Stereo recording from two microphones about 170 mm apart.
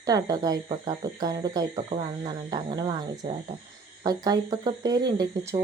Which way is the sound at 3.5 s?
35° right (ahead or behind).